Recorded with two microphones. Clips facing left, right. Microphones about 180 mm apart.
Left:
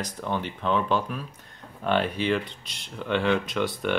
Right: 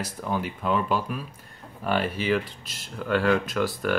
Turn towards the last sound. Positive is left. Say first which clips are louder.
# right 1 dB
turn(degrees=0)  # may be behind; listen again after turning